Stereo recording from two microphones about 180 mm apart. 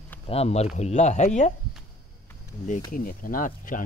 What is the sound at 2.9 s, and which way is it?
Speech, 50° left (ahead or behind).